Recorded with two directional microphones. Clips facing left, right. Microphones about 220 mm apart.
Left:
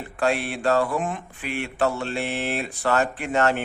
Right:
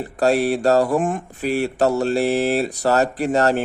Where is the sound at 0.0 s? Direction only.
40° right (ahead or behind).